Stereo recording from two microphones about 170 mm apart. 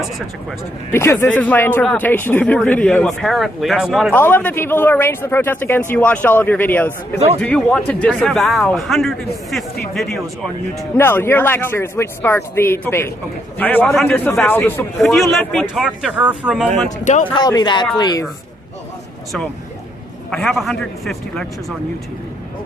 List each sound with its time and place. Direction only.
0.9 s speech: 15° left (ahead or behind); by 4.1 s 5° right (ahead or behind)
4.1 s speech: 10° left (ahead or behind)
10.8 s speech: 15° left (ahead or behind)
15.1 s speech: centre (ahead or behind)
17.0 s speech: 45° left (ahead or behind)
17.3 s speech: 25° left (ahead or behind)
20.3 s speech: centre (ahead or behind)